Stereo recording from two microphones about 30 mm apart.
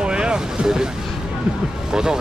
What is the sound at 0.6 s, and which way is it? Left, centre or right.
Speech, right.